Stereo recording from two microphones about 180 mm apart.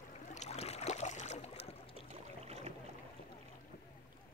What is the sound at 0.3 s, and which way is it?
Boat, 40° left (ahead or behind).